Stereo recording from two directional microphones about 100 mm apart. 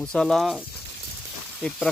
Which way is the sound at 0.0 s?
5° left (ahead or behind).